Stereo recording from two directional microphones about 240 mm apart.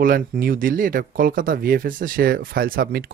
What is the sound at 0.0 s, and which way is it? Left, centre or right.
Speech, right.